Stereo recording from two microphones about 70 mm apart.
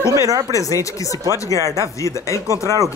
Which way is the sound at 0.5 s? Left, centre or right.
Left.